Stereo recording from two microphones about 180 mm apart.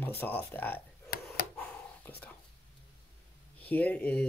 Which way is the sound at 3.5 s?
10° left (ahead or behind).